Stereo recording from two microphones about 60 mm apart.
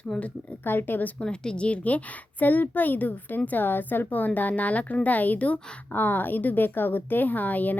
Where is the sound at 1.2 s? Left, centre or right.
Centre.